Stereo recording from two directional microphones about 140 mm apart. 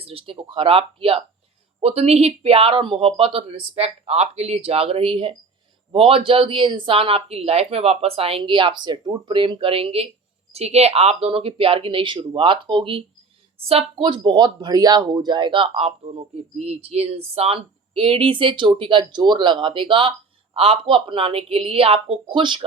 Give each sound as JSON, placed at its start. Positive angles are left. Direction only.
{"t": 0.0, "sound": "speech", "side_deg": -40}